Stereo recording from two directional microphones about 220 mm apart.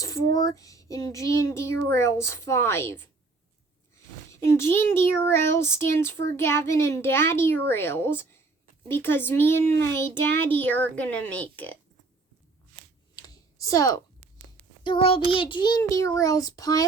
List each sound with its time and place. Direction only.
0.3 s speech: 15° left (ahead or behind)
4.3 s speech: 10° left (ahead or behind)
13.1 s a sound: 15° left (ahead or behind)
14.8 s speech: 25° left (ahead or behind)